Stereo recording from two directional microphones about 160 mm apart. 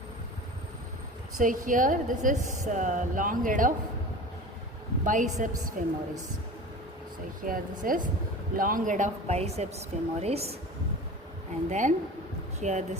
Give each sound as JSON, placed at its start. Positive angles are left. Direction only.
{"t": 1.4, "sound": "a woman's voice", "side_deg": -55}
{"t": 5.0, "sound": "a woman's voice", "side_deg": -55}
{"t": 7.4, "sound": "a woman's voice", "side_deg": -60}
{"t": 11.7, "sound": "speech", "side_deg": -50}